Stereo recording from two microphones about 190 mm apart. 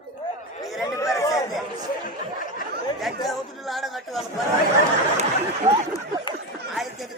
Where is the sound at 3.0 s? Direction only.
Centre (ahead or behind).